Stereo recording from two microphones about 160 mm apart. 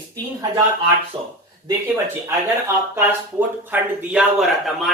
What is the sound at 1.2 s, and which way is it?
Speech, 30° right (ahead or behind).